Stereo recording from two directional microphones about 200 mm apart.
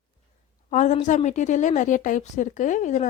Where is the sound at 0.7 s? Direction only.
40° left (ahead or behind).